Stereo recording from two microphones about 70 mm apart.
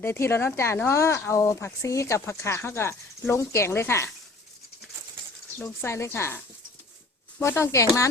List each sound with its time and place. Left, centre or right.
0.0 s speech: left
5.8 s speech: left